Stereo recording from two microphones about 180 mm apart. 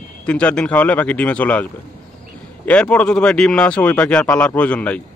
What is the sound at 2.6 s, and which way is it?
Speech, 5° left (ahead or behind).